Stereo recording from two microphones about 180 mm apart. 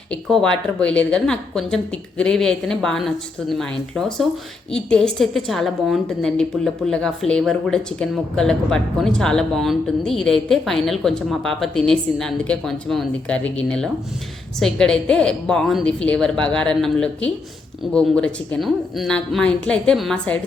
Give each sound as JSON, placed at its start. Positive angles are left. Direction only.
{"t": 0.1, "sound": "a woman's voice", "side_deg": 5}